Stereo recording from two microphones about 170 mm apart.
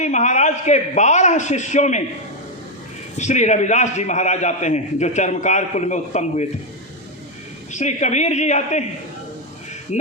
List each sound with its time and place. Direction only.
0.0 s a man's voice: 45° left (ahead or behind)
3.2 s a man's voice: 45° left (ahead or behind)
7.7 s a man's voice: 45° left (ahead or behind)
9.9 s speech: 40° left (ahead or behind)